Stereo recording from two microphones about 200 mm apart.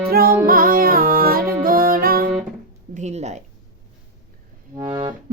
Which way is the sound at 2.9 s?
35° right (ahead or behind).